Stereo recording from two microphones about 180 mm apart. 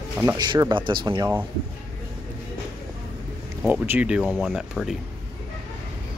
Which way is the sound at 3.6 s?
10° right (ahead or behind).